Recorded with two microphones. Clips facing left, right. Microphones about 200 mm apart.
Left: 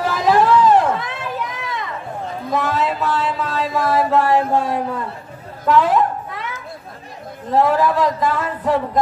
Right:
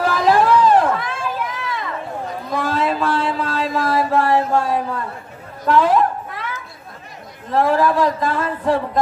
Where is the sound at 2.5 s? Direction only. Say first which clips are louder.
Even; 20° left (ahead or behind).